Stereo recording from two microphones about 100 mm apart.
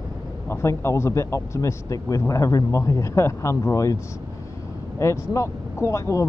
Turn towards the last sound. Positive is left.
turn(degrees=30)  # may be behind; listen again after turning